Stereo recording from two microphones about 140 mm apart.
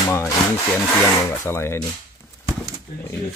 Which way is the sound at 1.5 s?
20° left (ahead or behind).